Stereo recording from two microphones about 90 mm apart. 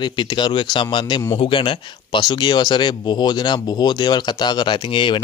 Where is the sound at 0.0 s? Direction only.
55° left (ahead or behind).